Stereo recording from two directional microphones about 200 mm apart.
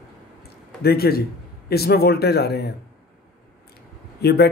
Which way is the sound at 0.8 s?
50° left (ahead or behind).